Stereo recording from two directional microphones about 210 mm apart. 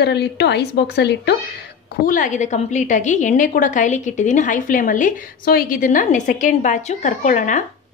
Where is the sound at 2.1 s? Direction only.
35° left (ahead or behind).